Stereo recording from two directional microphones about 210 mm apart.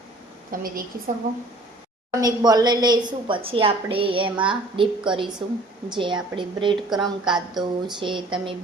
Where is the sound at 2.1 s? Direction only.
15° right (ahead or behind).